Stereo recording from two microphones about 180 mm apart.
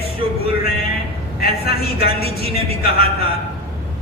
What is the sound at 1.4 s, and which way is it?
A woman's voice, 60° left (ahead or behind).